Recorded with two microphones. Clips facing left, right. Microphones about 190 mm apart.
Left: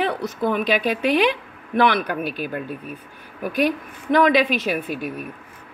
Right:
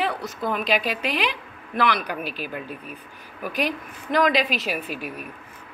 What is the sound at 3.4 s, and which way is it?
Speech, 50° left (ahead or behind).